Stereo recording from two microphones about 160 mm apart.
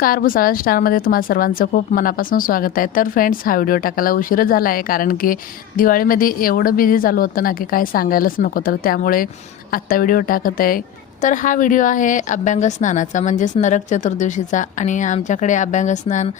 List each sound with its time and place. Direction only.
0.0 s a woman's voice: 65° left (ahead or behind)